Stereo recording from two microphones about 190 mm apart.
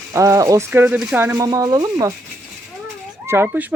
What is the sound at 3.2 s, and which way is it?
Speech, 15° right (ahead or behind).